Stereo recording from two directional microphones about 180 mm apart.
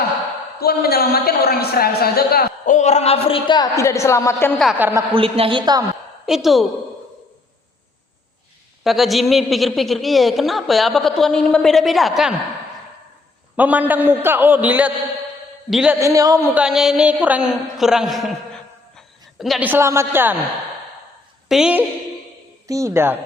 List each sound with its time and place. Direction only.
0.6 s a woman's voice: 60° left (ahead or behind); by 4.5 s 15° left (ahead or behind)
4.8 s a man's voice: 10° right (ahead or behind)
5.1 s a man's voice: 30° right (ahead or behind)
6.2 s a woman's voice: centre (ahead or behind)
8.8 s a woman's voice: centre (ahead or behind)
13.6 s a man's voice: 10° right (ahead or behind)
16.0 s a man's voice: 20° right (ahead or behind)
16.6 s a woman's voice: centre (ahead or behind)
21.5 s a woman's voice: 5° right (ahead or behind)
22.6 s a man's voice: 15° right (ahead or behind)